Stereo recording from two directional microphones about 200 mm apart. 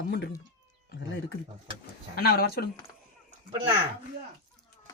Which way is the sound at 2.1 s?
50° left (ahead or behind).